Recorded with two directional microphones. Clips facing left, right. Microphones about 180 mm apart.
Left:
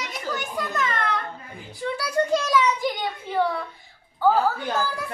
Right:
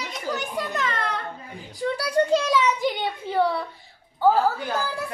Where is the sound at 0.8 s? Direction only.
35° right (ahead or behind).